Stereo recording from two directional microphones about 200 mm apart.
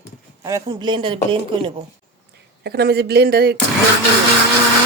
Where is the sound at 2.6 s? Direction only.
55° right (ahead or behind).